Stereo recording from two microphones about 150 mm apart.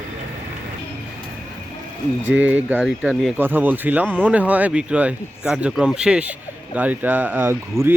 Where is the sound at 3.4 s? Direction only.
15° right (ahead or behind).